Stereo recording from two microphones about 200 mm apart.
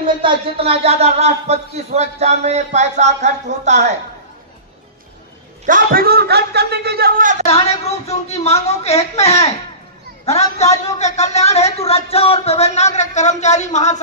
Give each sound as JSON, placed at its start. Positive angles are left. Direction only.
{"t": 0.2, "sound": "a man's voice", "side_deg": -30}
{"t": 5.7, "sound": "speech", "side_deg": -45}
{"t": 7.4, "sound": "speech", "side_deg": 30}